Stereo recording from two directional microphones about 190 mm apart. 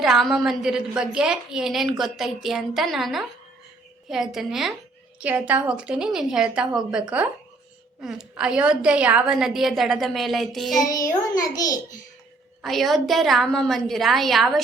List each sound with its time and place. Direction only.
0.0 s a woman's voice: centre (ahead or behind)
8.0 s a woman's voice: 5° right (ahead or behind)
10.8 s a child's voice: 20° left (ahead or behind)
12.6 s a woman's voice: centre (ahead or behind)